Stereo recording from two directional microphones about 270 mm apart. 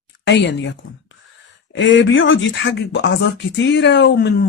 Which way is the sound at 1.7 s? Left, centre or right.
Left.